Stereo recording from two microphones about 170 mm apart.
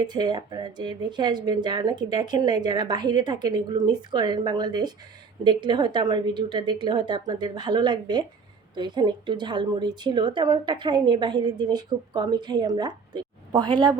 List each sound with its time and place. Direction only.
0.0 s a woman's voice: 25° right (ahead or behind)